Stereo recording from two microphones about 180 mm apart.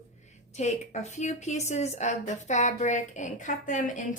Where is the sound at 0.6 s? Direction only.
40° left (ahead or behind).